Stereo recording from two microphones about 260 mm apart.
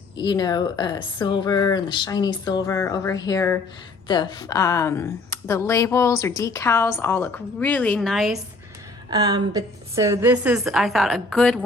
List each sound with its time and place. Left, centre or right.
0.2 s speech: centre
9.0 s a woman's voice: centre